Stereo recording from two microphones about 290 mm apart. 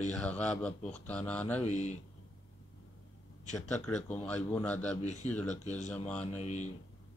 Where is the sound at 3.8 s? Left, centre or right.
Centre.